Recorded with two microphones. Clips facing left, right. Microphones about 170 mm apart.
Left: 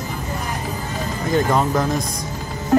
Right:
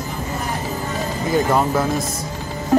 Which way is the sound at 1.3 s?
5° right (ahead or behind).